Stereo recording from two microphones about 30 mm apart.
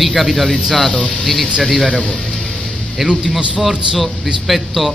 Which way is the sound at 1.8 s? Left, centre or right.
Left.